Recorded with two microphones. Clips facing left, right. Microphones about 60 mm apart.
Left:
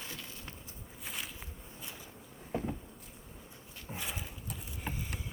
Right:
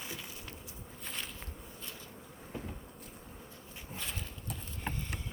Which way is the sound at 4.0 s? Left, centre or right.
Centre.